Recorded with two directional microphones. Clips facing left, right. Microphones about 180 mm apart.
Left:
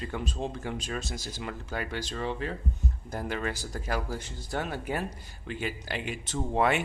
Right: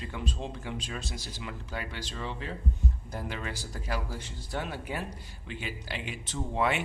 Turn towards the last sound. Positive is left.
turn(degrees=50)  # may be behind; listen again after turning